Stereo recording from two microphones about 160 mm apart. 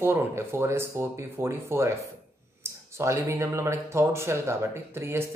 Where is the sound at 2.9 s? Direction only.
20° right (ahead or behind).